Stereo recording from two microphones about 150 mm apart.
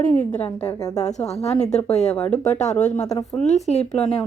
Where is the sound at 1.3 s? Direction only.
45° left (ahead or behind).